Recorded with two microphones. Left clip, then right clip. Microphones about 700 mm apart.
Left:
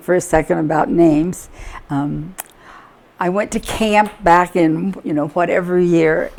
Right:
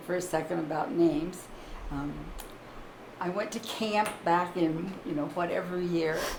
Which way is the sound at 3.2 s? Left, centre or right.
Left.